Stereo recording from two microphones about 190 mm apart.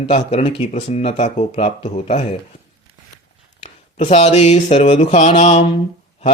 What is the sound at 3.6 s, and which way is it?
Speech, 35° left (ahead or behind).